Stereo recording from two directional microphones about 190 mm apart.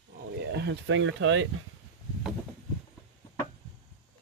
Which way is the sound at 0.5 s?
65° right (ahead or behind).